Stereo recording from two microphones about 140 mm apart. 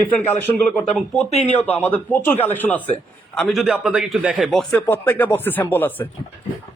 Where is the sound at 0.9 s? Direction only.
Centre (ahead or behind).